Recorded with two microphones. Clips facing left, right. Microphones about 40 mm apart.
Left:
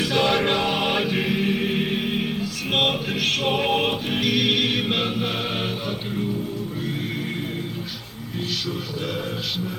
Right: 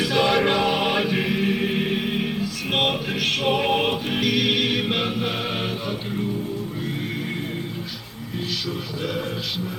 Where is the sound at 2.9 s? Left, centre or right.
Centre.